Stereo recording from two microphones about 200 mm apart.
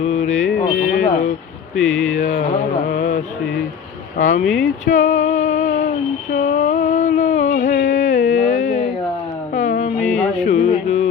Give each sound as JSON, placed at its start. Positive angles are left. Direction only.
{"t": 0.0, "sound": "mantra", "side_deg": 35}
{"t": 0.5, "sound": "a sound", "side_deg": 45}
{"t": 1.7, "sound": "speech", "side_deg": 5}
{"t": 2.1, "sound": "mantra", "side_deg": 45}
{"t": 4.2, "sound": "speech", "side_deg": 40}
{"t": 4.4, "sound": "speech", "side_deg": 5}
{"t": 4.9, "sound": "female singing", "side_deg": 40}
{"t": 6.3, "sound": "a sound", "side_deg": 40}
{"t": 10.0, "sound": "music", "side_deg": 5}
{"t": 10.4, "sound": "music", "side_deg": 40}